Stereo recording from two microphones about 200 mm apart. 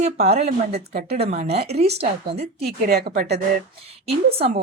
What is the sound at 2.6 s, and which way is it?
Speech, 50° right (ahead or behind).